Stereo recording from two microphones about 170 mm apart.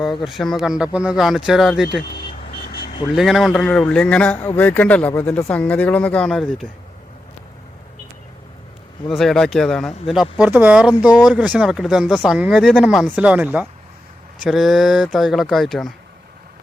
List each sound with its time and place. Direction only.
0.3 s speech: centre (ahead or behind)
2.1 s vehicle: 70° left (ahead or behind)
3.2 s a man's voice: centre (ahead or behind)
9.0 s speech: centre (ahead or behind)